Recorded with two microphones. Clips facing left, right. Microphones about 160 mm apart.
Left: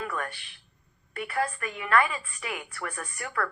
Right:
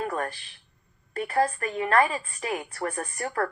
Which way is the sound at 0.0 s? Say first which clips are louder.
Right 4 dB; 35° right (ahead or behind).